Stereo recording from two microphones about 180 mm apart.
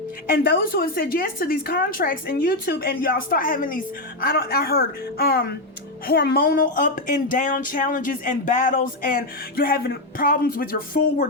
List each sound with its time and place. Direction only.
0.3 s a woman's voice: 55° left (ahead or behind)